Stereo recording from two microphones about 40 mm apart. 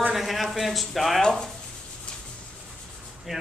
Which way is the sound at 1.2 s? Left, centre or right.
Centre.